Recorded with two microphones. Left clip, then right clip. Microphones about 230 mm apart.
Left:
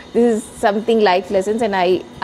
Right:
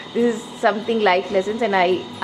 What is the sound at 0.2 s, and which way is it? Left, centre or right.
A woman's voice, left.